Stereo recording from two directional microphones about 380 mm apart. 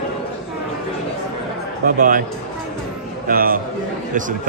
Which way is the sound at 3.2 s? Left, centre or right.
Right.